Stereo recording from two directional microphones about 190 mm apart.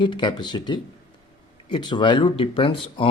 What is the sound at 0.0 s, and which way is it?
Speech, 25° left (ahead or behind).